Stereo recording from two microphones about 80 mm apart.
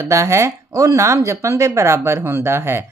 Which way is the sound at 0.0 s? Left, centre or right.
Right.